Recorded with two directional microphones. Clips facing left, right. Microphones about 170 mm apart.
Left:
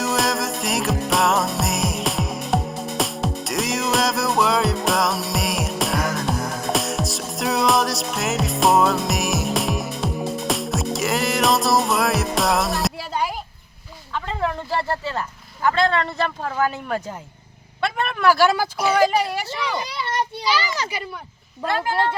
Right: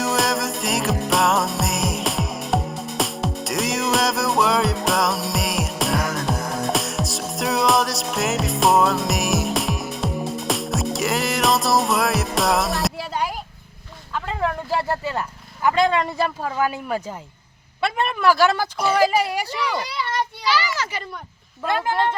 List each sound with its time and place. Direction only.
0.0 s music: centre (ahead or behind)
14.1 s a woman's voice: centre (ahead or behind)
19.6 s a child's voice: 15° left (ahead or behind)
20.0 s children playing: 20° left (ahead or behind)